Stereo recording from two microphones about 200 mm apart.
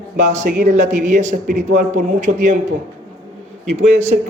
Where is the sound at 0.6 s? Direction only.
40° right (ahead or behind).